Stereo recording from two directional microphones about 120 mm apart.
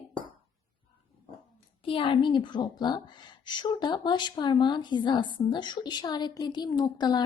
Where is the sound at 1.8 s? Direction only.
45° left (ahead or behind).